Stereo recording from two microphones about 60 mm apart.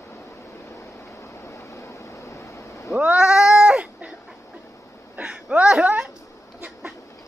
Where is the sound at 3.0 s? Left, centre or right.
Centre.